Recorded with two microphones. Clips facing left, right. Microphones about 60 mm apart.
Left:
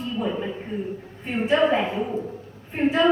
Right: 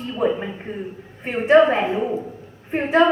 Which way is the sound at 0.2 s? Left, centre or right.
Right.